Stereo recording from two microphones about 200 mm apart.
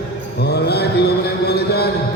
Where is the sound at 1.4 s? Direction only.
55° left (ahead or behind).